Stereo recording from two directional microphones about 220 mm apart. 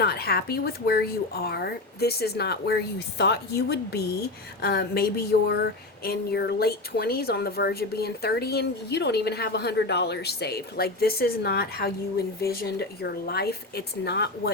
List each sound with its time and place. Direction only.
0.0 s speech: 45° left (ahead or behind)